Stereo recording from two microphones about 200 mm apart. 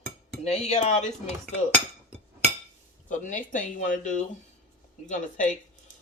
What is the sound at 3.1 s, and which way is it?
Speech, 40° left (ahead or behind).